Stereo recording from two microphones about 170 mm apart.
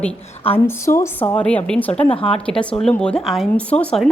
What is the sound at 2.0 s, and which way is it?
Speech, 35° left (ahead or behind).